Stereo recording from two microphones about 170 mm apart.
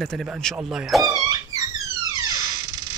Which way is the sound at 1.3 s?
20° right (ahead or behind).